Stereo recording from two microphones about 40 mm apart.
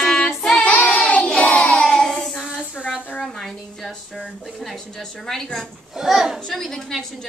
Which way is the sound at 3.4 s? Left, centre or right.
Centre.